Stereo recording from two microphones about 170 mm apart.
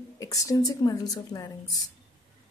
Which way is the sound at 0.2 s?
20° left (ahead or behind).